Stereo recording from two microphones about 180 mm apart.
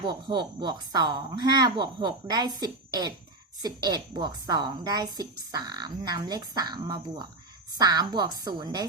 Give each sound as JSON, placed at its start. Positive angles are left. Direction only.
{"t": 0.0, "sound": "a woman's voice", "side_deg": -25}